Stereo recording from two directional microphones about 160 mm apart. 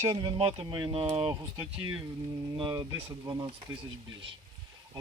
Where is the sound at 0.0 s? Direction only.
30° right (ahead or behind).